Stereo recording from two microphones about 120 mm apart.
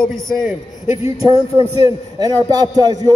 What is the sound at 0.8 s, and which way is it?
Speech, 55° left (ahead or behind).